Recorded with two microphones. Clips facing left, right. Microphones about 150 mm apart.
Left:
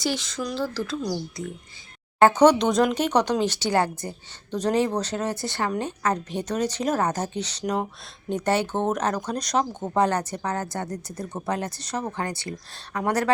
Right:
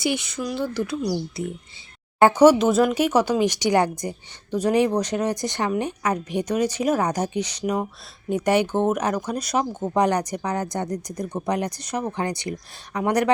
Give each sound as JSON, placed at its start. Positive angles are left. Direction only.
{"t": 0.2, "sound": "speech", "side_deg": -15}